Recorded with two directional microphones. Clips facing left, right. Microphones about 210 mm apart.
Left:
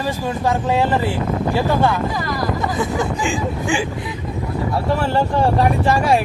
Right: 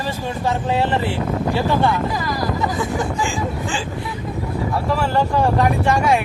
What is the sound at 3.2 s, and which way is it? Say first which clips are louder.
Speech: left 1 dB; 20° left (ahead or behind).